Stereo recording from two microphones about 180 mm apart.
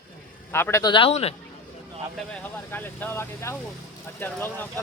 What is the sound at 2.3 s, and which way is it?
Speech, 10° left (ahead or behind).